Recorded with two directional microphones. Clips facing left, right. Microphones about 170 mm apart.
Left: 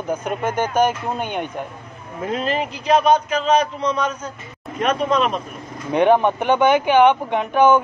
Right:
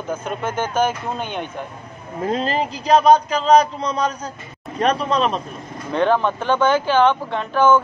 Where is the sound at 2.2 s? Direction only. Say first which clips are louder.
Right 1 dB; 35° right (ahead or behind).